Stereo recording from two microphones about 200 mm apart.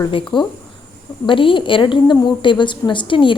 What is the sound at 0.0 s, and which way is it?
A woman's voice, 25° left (ahead or behind).